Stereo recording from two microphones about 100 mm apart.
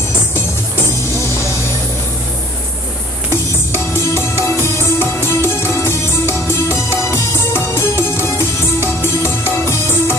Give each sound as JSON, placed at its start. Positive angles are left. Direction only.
{"t": 3.3, "sound": "music", "side_deg": 25}